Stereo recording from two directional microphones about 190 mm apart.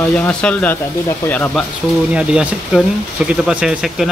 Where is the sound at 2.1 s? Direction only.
5° right (ahead or behind).